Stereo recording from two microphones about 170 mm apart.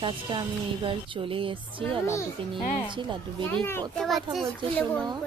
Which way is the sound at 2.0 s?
15° left (ahead or behind).